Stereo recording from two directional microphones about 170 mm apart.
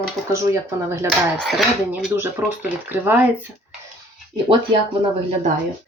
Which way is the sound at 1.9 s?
10° right (ahead or behind).